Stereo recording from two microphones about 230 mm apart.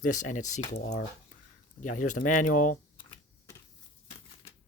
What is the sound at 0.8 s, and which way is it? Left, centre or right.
Speech, left.